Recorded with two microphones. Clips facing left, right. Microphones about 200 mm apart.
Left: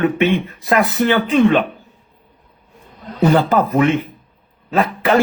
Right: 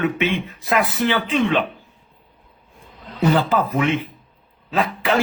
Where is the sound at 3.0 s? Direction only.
50° left (ahead or behind).